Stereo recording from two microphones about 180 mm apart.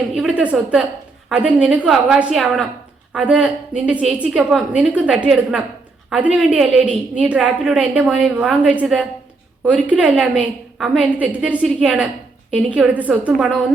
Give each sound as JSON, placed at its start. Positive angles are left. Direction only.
{"t": 0.2, "sound": "a woman's voice", "side_deg": -5}